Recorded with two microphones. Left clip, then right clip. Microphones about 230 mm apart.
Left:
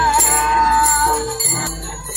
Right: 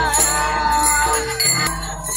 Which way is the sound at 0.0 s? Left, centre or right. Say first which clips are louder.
Left 3 dB; right.